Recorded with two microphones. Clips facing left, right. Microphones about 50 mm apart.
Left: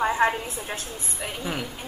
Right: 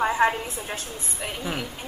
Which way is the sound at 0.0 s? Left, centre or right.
Centre.